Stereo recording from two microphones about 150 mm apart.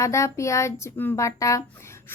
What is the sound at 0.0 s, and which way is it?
Humming, 20° left (ahead or behind).